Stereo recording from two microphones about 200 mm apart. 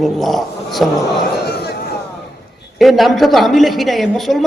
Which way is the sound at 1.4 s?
50° left (ahead or behind).